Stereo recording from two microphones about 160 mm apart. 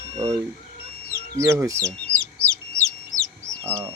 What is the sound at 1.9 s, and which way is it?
Chicken, 5° left (ahead or behind).